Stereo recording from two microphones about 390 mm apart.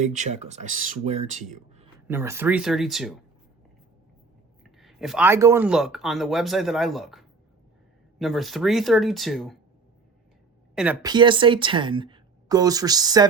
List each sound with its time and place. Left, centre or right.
0.2 s a woman's voice: centre
2.0 s speech: centre
4.6 s speech: centre
10.8 s a woman's voice: centre